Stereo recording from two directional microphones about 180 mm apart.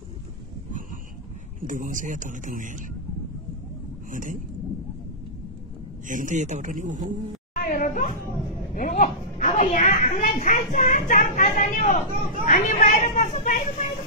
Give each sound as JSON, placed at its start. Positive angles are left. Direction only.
{"t": 1.6, "sound": "a man's voice", "side_deg": -45}
{"t": 4.1, "sound": "speech", "side_deg": -45}
{"t": 6.0, "sound": "a man's voice", "side_deg": -45}
{"t": 7.5, "sound": "a woman's voice", "side_deg": 50}